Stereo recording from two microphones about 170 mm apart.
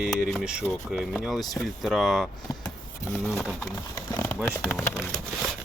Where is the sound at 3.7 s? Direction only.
20° left (ahead or behind).